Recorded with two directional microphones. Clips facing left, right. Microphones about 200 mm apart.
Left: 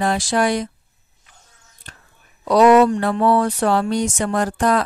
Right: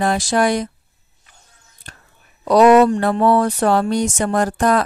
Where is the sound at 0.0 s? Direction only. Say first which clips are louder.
Right 2 dB; 45° right (ahead or behind).